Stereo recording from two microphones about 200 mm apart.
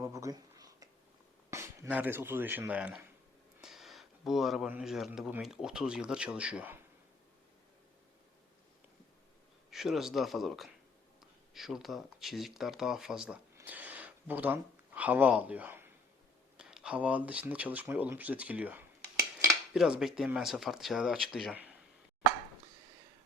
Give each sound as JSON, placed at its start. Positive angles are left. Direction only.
{"t": 0.0, "sound": "a sound", "side_deg": -15}
{"t": 1.5, "sound": "speech", "side_deg": -15}
{"t": 9.6, "sound": "speech", "side_deg": 0}